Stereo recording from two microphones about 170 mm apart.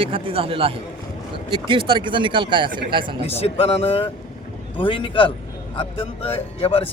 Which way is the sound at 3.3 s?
35° left (ahead or behind).